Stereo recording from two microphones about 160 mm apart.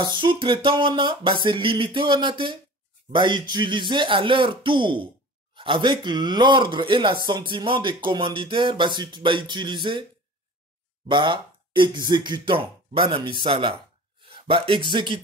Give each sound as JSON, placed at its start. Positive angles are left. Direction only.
{"t": 0.0, "sound": "speech", "side_deg": -30}
{"t": 11.1, "sound": "speech", "side_deg": -30}
{"t": 14.3, "sound": "a sound", "side_deg": -35}
{"t": 14.9, "sound": "speech", "side_deg": -30}